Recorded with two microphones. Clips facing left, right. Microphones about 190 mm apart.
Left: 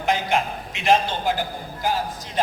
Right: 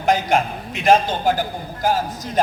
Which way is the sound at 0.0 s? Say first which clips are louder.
Right 4 dB; 40° right (ahead or behind).